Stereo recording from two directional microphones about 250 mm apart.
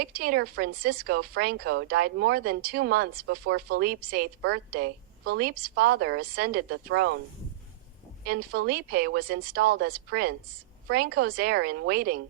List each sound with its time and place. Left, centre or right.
0.0 s speech: right
8.3 s a woman's voice: right